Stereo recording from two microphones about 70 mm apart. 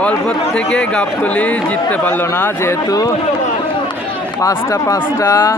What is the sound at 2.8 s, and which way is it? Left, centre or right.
Speech, left.